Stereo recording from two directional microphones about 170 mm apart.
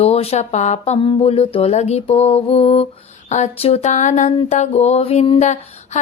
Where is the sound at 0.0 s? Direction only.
35° left (ahead or behind).